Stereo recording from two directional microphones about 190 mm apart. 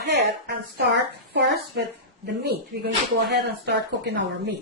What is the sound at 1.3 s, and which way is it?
Speech, 65° right (ahead or behind).